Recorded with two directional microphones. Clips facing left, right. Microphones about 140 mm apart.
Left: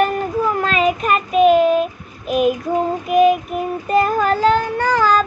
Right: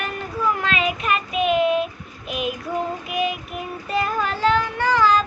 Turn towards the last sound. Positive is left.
turn(degrees=45)  # may be behind; listen again after turning